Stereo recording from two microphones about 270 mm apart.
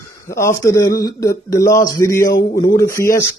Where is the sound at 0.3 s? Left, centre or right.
Centre.